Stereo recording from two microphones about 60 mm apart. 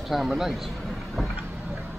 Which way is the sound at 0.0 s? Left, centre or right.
Centre.